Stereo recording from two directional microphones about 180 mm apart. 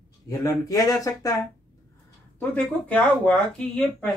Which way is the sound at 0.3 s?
20° left (ahead or behind).